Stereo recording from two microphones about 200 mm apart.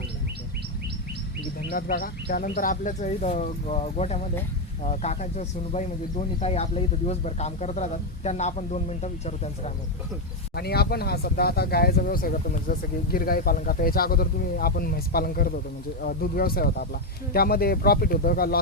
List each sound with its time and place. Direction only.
1.7 s speech: 45° left (ahead or behind)
10.5 s speech: 50° left (ahead or behind)